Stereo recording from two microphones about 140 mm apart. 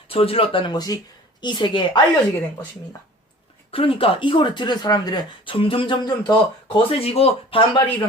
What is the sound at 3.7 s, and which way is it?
Speech, 40° left (ahead or behind).